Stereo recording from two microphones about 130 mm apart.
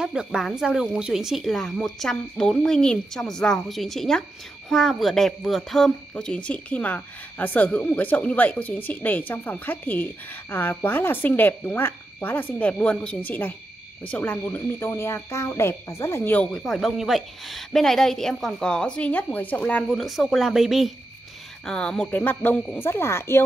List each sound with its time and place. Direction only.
0.0 s speech: 5° right (ahead or behind); by 16.6 s 15° left (ahead or behind)
16.6 s speech: centre (ahead or behind)
19.9 s speech: centre (ahead or behind); by 23.4 s 20° left (ahead or behind)